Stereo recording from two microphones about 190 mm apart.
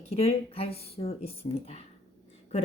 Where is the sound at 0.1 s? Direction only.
30° left (ahead or behind).